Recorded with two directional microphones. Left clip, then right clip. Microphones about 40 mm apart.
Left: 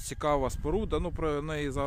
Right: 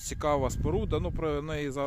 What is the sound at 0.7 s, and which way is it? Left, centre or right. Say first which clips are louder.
Speech: even; left.